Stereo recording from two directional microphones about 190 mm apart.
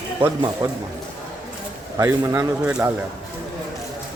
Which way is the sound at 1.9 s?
15° right (ahead or behind).